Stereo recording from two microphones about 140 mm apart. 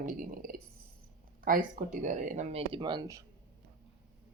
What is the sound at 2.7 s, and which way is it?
Speech, 30° right (ahead or behind).